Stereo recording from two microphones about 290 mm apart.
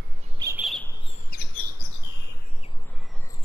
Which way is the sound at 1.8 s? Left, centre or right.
Left.